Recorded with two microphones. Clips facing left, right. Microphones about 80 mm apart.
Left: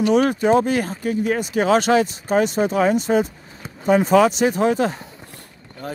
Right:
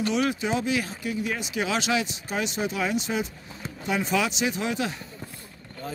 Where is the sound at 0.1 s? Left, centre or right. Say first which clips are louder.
Left 10 dB; left.